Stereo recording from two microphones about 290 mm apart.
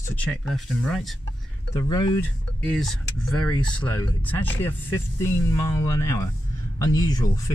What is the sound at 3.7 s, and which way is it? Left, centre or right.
Speech, centre.